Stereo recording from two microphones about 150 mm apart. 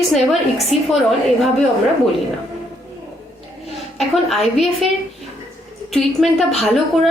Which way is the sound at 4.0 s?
Centre (ahead or behind).